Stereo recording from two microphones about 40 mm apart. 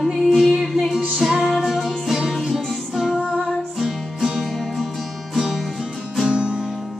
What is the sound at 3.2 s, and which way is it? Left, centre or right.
Music, centre.